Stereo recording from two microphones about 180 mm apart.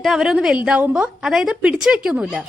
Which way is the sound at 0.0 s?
Centre (ahead or behind).